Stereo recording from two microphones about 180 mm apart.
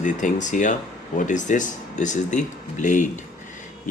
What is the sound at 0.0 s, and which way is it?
Speech, 45° left (ahead or behind).